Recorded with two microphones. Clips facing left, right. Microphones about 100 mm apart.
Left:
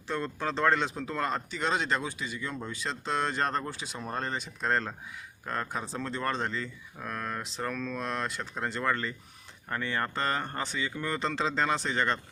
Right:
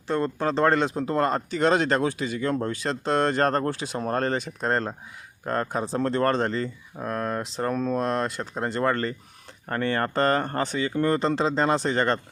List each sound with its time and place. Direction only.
0.1 s speech: 45° right (ahead or behind)
1.5 s speech: 60° right (ahead or behind)
4.6 s speech: 40° right (ahead or behind)
5.9 s speech: 55° right (ahead or behind)
7.0 s speech: 35° right (ahead or behind)